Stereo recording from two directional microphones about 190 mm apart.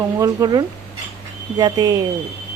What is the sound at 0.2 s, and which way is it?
A woman's voice, 20° right (ahead or behind).